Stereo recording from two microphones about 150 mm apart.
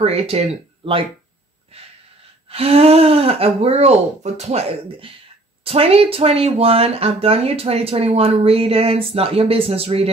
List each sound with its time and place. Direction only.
0.0 s speech: 40° right (ahead or behind)
2.5 s speech: 40° right (ahead or behind)